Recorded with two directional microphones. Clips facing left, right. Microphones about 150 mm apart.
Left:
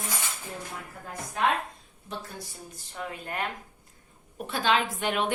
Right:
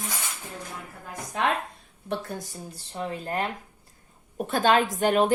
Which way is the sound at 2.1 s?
65° right (ahead or behind).